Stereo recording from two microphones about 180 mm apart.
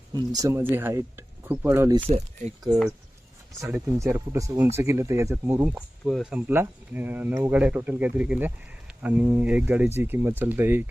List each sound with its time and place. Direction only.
0.1 s speech: 20° right (ahead or behind)
2.0 s speech: 35° right (ahead or behind)
3.6 s speech: 15° right (ahead or behind)
5.6 s speech: centre (ahead or behind)
6.5 s speech: 10° right (ahead or behind)